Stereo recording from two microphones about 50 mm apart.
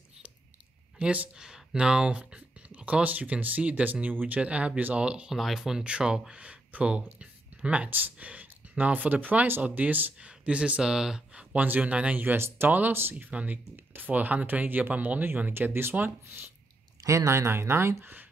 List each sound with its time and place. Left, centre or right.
0.9 s speech: right
1.3 s speech: centre
5.3 s speech: centre
6.4 s speech: right
7.9 s speech: right
8.3 s speech: right
10.2 s speech: right
10.8 s speech: centre
11.5 s speech: right
12.2 s speech: right
17.0 s speech: right